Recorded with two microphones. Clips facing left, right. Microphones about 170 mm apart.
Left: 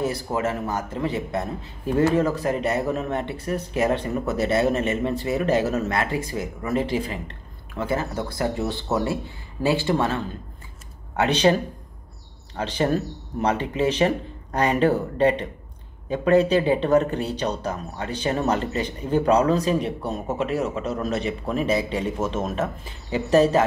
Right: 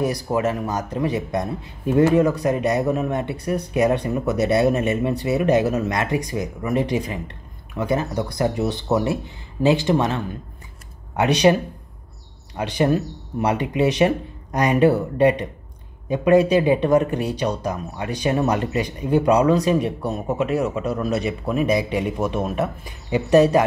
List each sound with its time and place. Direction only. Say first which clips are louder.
0.0 s speech: right 3 dB; 15° right (ahead or behind)
12.5 s speech: right 3 dB; 15° right (ahead or behind)